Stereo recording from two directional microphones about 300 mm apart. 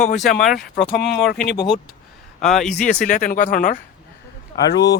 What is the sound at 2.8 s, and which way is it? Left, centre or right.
Speech, left.